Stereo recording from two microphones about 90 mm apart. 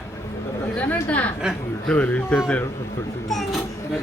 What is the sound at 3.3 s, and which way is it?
Speech, centre (ahead or behind).